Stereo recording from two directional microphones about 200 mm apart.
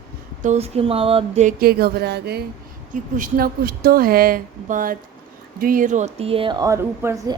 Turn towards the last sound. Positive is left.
turn(degrees=-15)  # may be behind; listen again after turning